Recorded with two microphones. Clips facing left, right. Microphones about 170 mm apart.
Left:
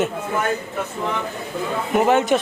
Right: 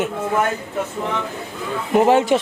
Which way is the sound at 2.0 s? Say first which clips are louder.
Right 2 dB; 30° right (ahead or behind).